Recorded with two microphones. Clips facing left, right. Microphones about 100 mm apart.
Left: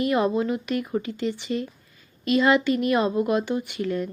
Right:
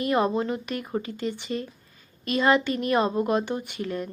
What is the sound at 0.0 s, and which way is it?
Speech, 30° right (ahead or behind).